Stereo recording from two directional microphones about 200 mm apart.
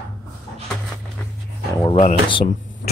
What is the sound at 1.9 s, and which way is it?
Speech, 25° left (ahead or behind).